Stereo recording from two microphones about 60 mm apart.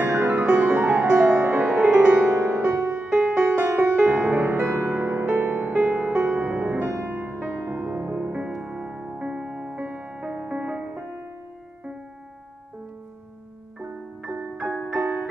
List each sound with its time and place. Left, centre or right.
0.0 s music: right
0.6 s music: right
8.5 s music: centre
9.8 s music: right
13.7 s music: centre
15.0 s music: right